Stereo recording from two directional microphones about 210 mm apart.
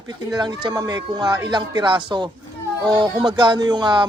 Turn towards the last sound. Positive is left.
turn(degrees=-20)  # may be behind; listen again after turning